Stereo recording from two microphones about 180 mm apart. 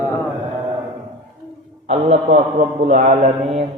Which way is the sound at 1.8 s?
35° right (ahead or behind).